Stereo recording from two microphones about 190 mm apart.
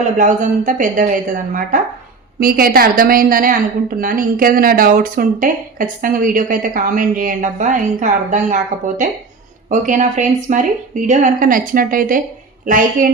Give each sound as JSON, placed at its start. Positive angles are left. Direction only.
{"t": 0.2, "sound": "a woman's voice", "side_deg": -45}